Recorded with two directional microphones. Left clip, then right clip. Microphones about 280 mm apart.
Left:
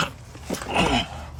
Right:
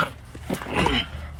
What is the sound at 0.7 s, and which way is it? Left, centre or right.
Dog, centre.